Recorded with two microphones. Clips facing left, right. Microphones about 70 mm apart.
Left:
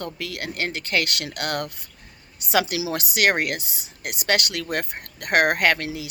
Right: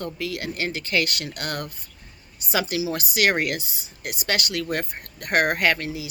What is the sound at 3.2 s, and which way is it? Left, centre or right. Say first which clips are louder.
Speech: left 1 dB; left.